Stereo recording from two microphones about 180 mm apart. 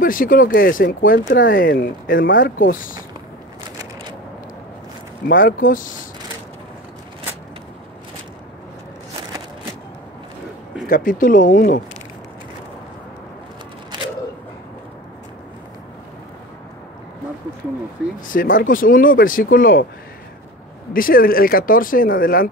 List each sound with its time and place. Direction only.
0.0 s speech: 50° left (ahead or behind)
5.3 s speech: 50° left (ahead or behind)
10.9 s speech: 50° left (ahead or behind)
18.2 s speech: 50° left (ahead or behind)
20.9 s speech: 55° left (ahead or behind)